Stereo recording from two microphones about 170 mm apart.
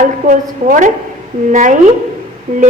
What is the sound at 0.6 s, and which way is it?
Speech, 40° right (ahead or behind).